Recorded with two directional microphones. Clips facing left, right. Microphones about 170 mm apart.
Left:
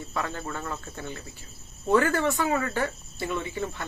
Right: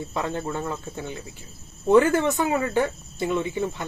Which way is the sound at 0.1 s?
20° right (ahead or behind).